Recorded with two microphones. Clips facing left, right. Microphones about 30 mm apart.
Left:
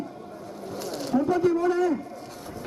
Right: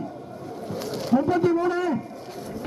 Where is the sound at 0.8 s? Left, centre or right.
Centre.